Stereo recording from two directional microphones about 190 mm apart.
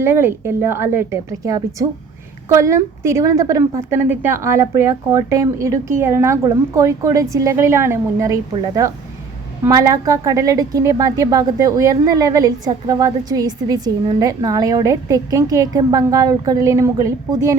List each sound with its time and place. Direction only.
0.0 s speech: 10° right (ahead or behind)